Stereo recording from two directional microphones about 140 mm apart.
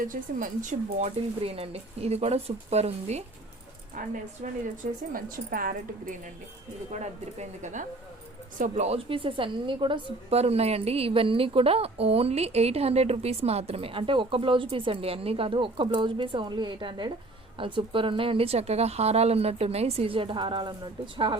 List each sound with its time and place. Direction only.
0.0 s speech: 75° right (ahead or behind)
1.4 s a woman's voice: 45° right (ahead or behind)
4.0 s speech: 70° right (ahead or behind)
5.1 s a woman's voice: 90° right
6.9 s a woman's voice: 55° right (ahead or behind); by 20.7 s 35° right (ahead or behind)